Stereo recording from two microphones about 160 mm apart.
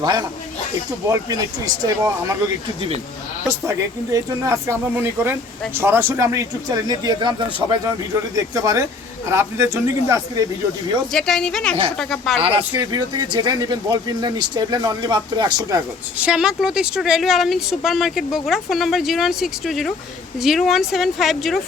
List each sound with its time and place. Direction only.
0.0 s speech: 25° right (ahead or behind)
3.5 s speech: 20° right (ahead or behind)
11.1 s speech: centre (ahead or behind)
12.4 s speech: 35° right (ahead or behind)
16.1 s speech: 5° right (ahead or behind)